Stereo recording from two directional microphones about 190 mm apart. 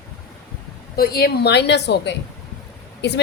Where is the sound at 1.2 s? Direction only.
55° left (ahead or behind).